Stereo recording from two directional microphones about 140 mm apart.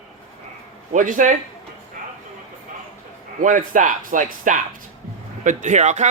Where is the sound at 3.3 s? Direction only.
75° right (ahead or behind).